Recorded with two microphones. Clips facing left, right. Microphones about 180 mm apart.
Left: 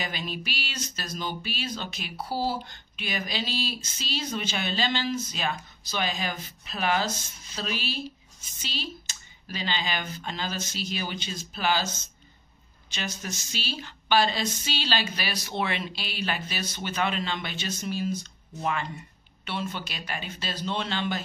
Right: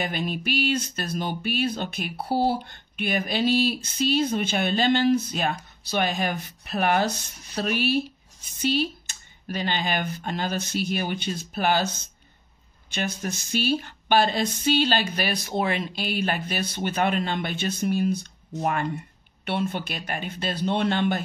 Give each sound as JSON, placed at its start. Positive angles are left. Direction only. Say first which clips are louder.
{"t": 0.0, "sound": "speech", "louder": "right 6 dB", "side_deg": -55}